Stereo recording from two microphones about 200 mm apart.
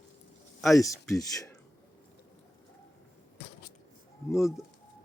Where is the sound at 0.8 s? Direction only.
15° left (ahead or behind).